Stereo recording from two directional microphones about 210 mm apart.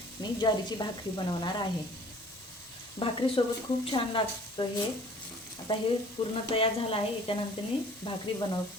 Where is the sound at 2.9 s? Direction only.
25° left (ahead or behind).